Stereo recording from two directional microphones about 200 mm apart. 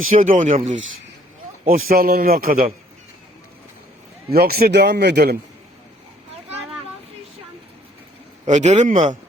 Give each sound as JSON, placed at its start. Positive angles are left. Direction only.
{"t": 0.1, "sound": "speech", "side_deg": -40}
{"t": 1.6, "sound": "a man's voice", "side_deg": -45}
{"t": 4.3, "sound": "a man's voice", "side_deg": -50}
{"t": 8.4, "sound": "speech", "side_deg": -35}